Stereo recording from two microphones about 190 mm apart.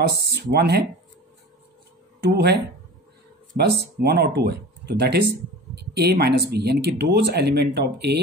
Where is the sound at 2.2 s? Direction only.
60° right (ahead or behind).